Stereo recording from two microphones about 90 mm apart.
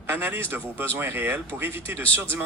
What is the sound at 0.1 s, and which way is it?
Speech, 25° right (ahead or behind).